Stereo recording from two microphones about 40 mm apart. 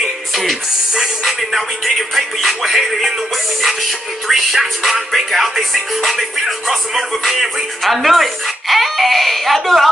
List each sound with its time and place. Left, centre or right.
0.0 s music: centre
4.3 s music: centre